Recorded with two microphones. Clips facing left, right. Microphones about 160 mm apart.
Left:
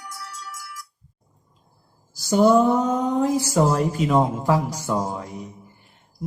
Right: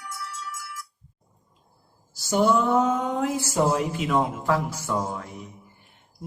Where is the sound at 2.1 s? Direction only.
40° left (ahead or behind).